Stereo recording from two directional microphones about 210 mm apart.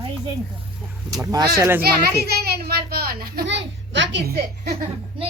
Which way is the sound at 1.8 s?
50° right (ahead or behind).